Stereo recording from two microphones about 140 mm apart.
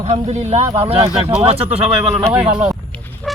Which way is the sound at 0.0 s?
50° right (ahead or behind).